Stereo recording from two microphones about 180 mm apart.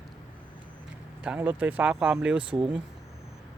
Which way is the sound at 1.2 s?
5° right (ahead or behind).